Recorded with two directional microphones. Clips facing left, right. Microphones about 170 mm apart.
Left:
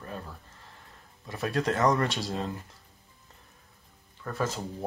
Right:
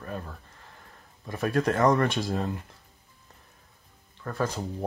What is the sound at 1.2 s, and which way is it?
Speech, 20° right (ahead or behind).